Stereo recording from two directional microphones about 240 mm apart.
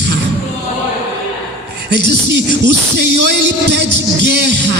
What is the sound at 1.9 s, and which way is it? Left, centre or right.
A man's voice, right.